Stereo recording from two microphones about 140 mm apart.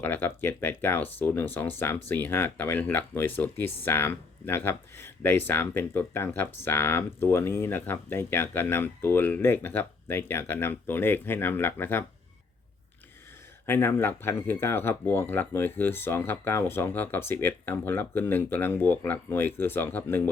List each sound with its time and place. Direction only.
0.0 s speech: 15° left (ahead or behind)
13.7 s speech: 15° left (ahead or behind)